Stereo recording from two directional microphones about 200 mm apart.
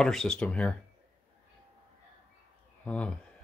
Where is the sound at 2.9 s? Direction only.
5° left (ahead or behind).